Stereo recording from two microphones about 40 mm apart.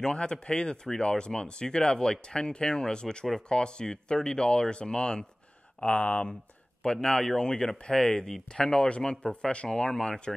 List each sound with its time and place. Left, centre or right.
0.0 s speech: left
5.8 s speech: left
6.8 s speech: centre